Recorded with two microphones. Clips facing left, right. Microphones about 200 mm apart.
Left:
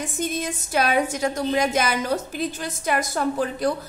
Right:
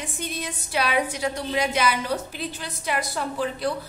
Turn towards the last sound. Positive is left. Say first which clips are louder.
# left 4 dB
turn(degrees=45)  # may be behind; listen again after turning